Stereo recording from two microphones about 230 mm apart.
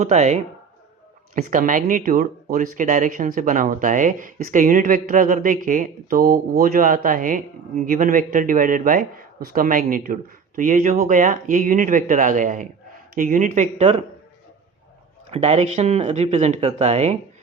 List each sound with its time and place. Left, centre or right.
0.0 s speech: right
15.3 s speech: right